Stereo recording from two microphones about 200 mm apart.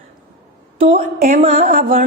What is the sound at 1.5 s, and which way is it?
Speech, 40° right (ahead or behind).